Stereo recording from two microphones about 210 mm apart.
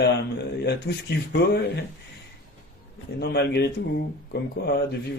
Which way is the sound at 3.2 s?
50° left (ahead or behind).